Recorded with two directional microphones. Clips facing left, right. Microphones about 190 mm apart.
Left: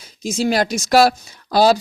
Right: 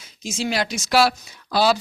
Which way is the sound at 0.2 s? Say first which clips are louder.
Left 6 dB; 40° left (ahead or behind).